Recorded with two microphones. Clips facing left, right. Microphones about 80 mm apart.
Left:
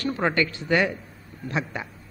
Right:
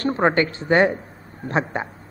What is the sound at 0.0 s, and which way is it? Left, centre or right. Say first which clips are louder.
A woman's voice: right 5 dB; right.